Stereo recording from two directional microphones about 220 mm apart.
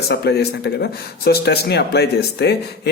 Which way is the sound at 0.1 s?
45° left (ahead or behind).